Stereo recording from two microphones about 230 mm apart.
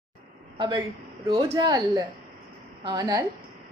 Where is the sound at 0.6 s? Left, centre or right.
Centre.